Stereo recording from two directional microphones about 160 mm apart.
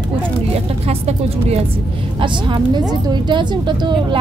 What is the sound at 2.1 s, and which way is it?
A woman's voice, 30° right (ahead or behind).